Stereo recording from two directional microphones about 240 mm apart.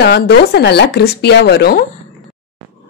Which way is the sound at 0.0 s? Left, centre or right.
Left.